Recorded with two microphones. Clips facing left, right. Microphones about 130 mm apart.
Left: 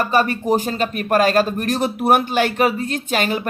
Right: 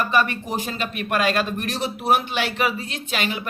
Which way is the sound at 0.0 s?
40° left (ahead or behind).